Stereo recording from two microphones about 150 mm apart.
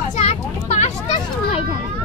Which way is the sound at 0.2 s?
50° left (ahead or behind).